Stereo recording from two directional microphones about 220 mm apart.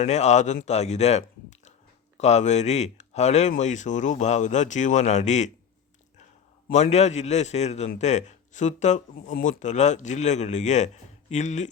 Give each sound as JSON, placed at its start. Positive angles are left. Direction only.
{"t": 0.0, "sound": "a man's voice", "side_deg": 30}
{"t": 6.7, "sound": "a man's voice", "side_deg": 30}